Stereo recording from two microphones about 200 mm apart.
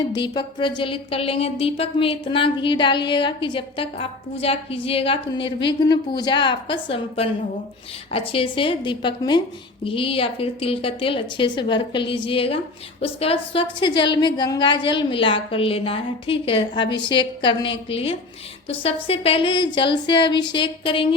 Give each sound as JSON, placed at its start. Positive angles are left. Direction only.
{"t": 0.1, "sound": "a woman's voice", "side_deg": 20}